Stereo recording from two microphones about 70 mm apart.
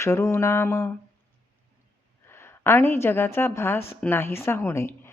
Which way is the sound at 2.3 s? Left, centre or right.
Left.